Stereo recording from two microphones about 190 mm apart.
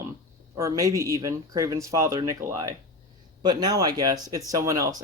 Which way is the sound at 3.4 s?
20° right (ahead or behind).